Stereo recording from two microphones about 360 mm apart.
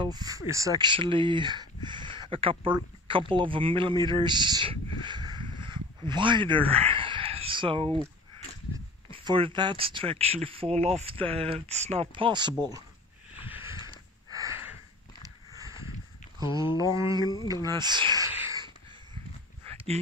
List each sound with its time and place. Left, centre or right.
0.0 s speech: centre
9.1 s speech: centre
13.5 s a sound: centre
16.3 s speech: centre
17.6 s a sound: centre
19.7 s dog: centre